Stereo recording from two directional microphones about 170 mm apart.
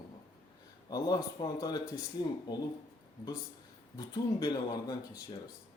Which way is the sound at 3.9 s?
25° left (ahead or behind).